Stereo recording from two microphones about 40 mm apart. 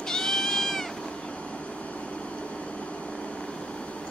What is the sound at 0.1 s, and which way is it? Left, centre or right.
Cat, centre.